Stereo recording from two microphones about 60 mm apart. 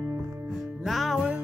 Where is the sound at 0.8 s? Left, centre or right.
Centre.